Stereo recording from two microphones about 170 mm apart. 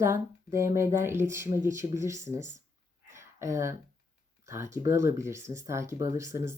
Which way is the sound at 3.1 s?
15° right (ahead or behind).